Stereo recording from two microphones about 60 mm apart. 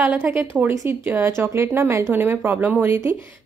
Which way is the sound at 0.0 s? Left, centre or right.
Right.